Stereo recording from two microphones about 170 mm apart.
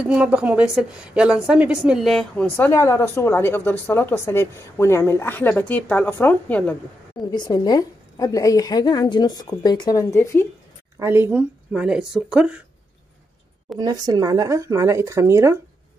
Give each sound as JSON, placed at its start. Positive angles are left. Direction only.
{"t": 0.0, "sound": "a woman's voice", "side_deg": -5}
{"t": 7.2, "sound": "a woman's voice", "side_deg": 25}
{"t": 11.0, "sound": "speech", "side_deg": -15}
{"t": 13.7, "sound": "speech", "side_deg": -25}